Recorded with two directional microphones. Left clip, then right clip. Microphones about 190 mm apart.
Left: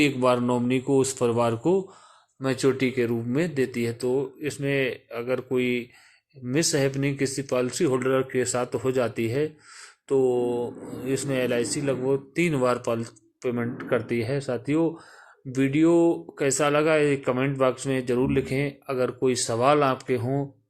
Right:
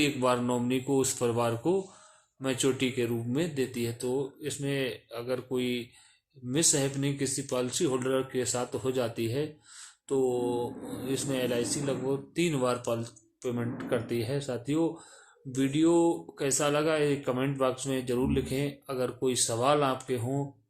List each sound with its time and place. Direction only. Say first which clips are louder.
0.0 s speech: left 5 dB; 30° left (ahead or behind)